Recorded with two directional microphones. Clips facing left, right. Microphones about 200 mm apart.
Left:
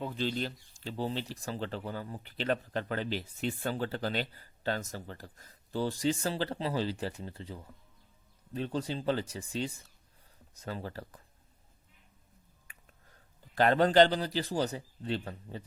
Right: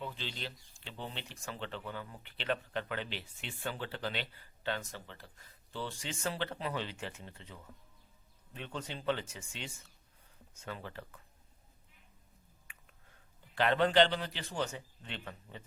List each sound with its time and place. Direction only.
0.0 s speech: 45° left (ahead or behind)
12.7 s finger snapping: 40° left (ahead or behind)
13.6 s speech: 40° left (ahead or behind)